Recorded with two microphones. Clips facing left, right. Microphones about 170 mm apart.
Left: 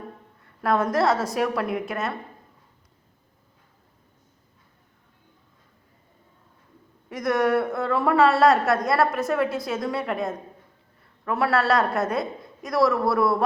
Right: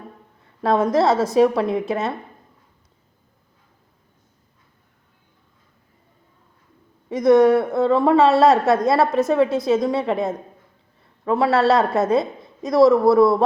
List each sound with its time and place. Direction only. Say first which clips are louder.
0.6 s a woman's voice: right 4 dB; 25° right (ahead or behind)
7.1 s a woman's voice: right 9 dB; 20° right (ahead or behind)